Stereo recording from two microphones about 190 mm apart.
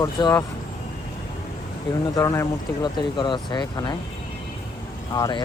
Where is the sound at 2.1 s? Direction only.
15° left (ahead or behind).